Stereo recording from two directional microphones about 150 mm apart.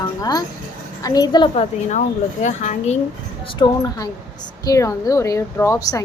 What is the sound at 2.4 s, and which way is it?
Speech, 50° left (ahead or behind).